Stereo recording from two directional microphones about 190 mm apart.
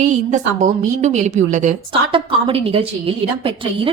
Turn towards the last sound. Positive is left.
turn(degrees=-30)  # may be behind; listen again after turning